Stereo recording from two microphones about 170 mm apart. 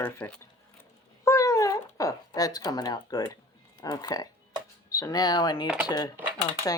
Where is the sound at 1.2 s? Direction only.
20° left (ahead or behind).